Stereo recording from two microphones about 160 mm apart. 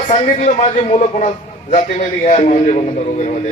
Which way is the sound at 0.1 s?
45° left (ahead or behind).